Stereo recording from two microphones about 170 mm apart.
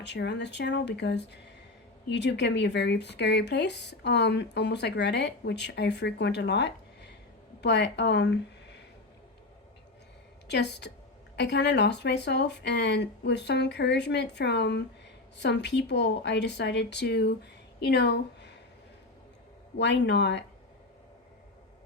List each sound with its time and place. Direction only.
0.0 s speech: 90° left
10.5 s speech: 90° left
19.7 s speech: 90° left